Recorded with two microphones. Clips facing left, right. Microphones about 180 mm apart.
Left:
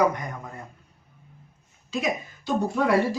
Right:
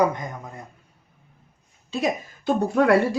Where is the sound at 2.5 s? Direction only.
60° right (ahead or behind).